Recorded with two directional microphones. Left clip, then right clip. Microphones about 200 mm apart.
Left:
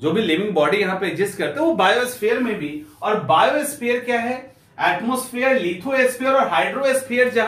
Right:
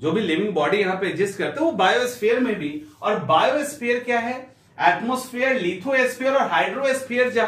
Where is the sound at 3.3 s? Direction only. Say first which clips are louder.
Left 2 dB; 15° left (ahead or behind).